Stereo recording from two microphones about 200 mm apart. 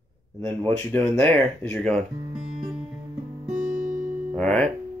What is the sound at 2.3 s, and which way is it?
Guitar, 5° right (ahead or behind).